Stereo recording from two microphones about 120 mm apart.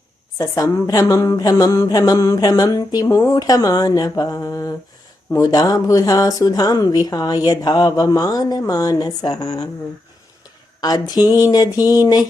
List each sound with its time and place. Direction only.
0.3 s a woman's voice: 25° left (ahead or behind)
10.8 s a woman's voice: 30° left (ahead or behind)